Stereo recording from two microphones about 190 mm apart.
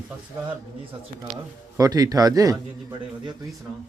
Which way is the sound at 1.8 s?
20° right (ahead or behind).